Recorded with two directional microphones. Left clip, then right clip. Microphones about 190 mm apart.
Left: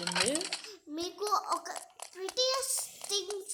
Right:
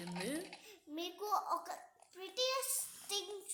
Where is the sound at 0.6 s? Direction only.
25° left (ahead or behind).